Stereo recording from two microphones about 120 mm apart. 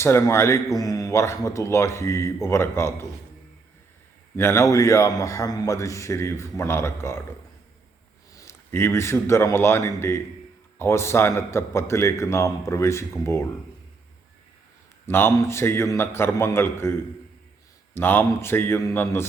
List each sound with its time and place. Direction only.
0.0 s a man's voice: 20° left (ahead or behind)
4.4 s a man's voice: 25° left (ahead or behind)
8.3 s a man's voice: 25° left (ahead or behind)
15.0 s a man's voice: 20° left (ahead or behind)
17.9 s a man's voice: 15° left (ahead or behind)